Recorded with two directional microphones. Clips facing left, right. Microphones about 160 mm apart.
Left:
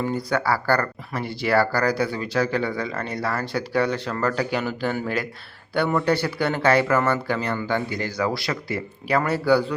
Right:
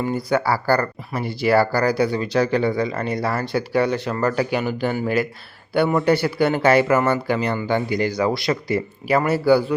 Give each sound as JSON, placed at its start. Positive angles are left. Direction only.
{"t": 0.0, "sound": "speech", "side_deg": -10}
{"t": 9.0, "sound": "speech", "side_deg": -10}